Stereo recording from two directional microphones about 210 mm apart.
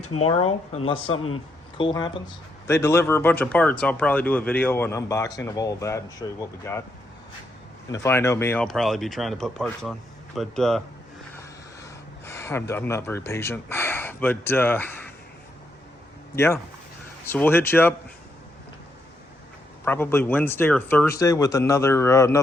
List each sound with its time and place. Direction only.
0.2 s speech: 30° left (ahead or behind); by 6.8 s 15° left (ahead or behind)
7.9 s speech: 15° left (ahead or behind)
8.6 s speech: centre (ahead or behind)
11.3 s a sound: 15° left (ahead or behind)
16.3 s speech: 10° left (ahead or behind)
19.8 s speech: 10° left (ahead or behind)